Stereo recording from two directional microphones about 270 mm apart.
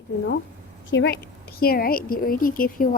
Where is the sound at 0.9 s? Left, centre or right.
Left.